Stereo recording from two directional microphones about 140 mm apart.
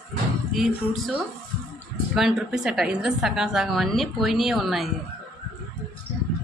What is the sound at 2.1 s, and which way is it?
A woman's voice, centre (ahead or behind).